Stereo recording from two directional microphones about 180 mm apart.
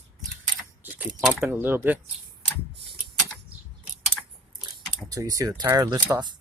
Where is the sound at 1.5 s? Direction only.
10° right (ahead or behind).